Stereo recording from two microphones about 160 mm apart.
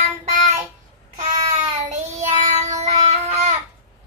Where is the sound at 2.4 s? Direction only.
45° right (ahead or behind).